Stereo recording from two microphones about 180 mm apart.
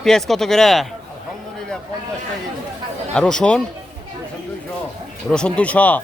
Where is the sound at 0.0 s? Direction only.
Centre (ahead or behind).